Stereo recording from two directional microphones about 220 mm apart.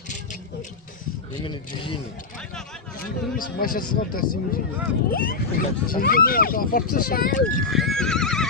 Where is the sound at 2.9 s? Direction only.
40° left (ahead or behind).